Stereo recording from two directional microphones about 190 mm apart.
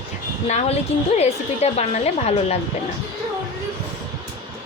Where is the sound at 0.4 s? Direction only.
35° left (ahead or behind).